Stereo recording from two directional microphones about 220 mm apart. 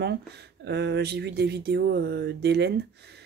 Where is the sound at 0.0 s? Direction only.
50° right (ahead or behind).